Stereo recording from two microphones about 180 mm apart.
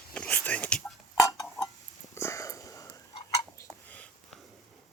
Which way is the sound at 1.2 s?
20° left (ahead or behind).